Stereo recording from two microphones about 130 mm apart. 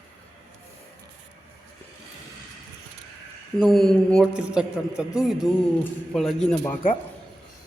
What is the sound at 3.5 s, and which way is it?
Speech, centre (ahead or behind).